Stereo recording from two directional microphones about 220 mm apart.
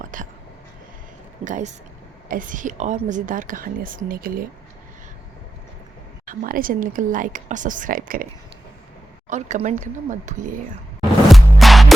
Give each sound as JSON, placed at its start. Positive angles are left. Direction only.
{"t": 0.0, "sound": "whispering", "side_deg": -35}
{"t": 1.5, "sound": "a woman's voice", "side_deg": -35}
{"t": 6.2, "sound": "a woman's voice", "side_deg": -40}
{"t": 9.3, "sound": "a woman's voice", "side_deg": -35}
{"t": 11.3, "sound": "music", "side_deg": 0}